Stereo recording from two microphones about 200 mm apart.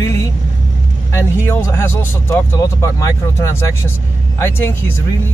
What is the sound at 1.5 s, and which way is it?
Speech, 10° left (ahead or behind).